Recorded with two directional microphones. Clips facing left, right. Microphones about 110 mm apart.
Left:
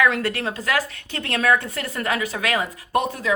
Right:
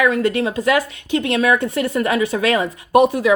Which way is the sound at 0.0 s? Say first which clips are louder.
Right 4 dB; 20° right (ahead or behind).